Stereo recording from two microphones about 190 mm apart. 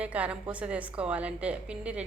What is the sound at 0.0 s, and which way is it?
A woman's voice, 5° right (ahead or behind).